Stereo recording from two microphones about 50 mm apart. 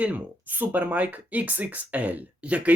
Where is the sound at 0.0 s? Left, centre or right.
Right.